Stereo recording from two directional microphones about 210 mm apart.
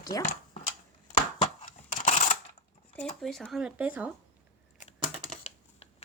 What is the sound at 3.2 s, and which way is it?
Speech, centre (ahead or behind).